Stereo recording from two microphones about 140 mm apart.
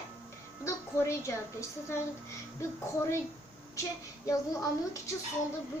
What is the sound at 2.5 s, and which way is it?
Speech, 20° left (ahead or behind).